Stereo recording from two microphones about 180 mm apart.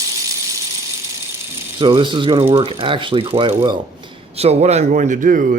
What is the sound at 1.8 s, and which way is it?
Speech, 30° right (ahead or behind).